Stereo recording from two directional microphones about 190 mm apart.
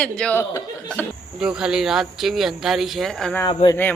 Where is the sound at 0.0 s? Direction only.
5° left (ahead or behind).